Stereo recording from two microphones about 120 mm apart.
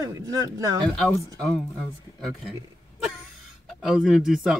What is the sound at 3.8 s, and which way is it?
Speech, 5° right (ahead or behind).